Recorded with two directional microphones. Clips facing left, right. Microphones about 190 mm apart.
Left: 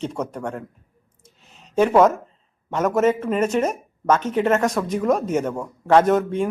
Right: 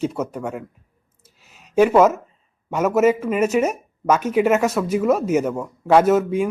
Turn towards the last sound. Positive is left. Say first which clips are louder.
# right 1 dB
turn(degrees=-5)  # may be behind; listen again after turning